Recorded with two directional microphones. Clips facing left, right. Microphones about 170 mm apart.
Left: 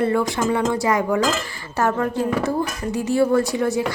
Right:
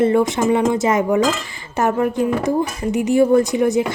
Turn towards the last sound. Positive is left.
turn(degrees=-20)  # may be behind; listen again after turning